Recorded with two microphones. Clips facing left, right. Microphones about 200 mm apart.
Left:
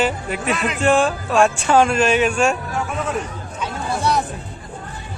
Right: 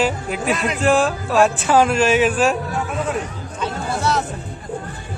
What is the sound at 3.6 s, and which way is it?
Chatter, 15° left (ahead or behind).